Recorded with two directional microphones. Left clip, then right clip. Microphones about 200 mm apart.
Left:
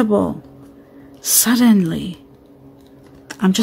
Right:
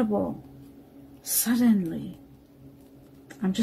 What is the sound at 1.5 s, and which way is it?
Speech, 35° left (ahead or behind).